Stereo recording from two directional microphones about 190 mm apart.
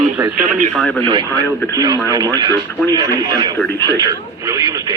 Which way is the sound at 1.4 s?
15° left (ahead or behind).